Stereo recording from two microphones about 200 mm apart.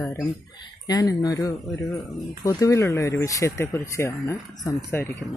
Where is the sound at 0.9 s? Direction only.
20° left (ahead or behind).